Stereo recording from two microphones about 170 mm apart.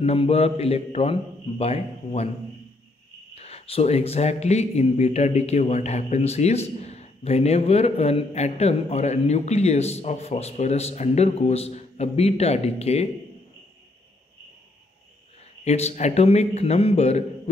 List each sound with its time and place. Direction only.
0.0 s speech: 35° left (ahead or behind)
3.3 s speech: 35° left (ahead or behind)
15.6 s speech: 40° left (ahead or behind)